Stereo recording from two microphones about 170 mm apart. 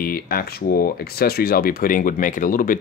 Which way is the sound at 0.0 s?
60° left (ahead or behind).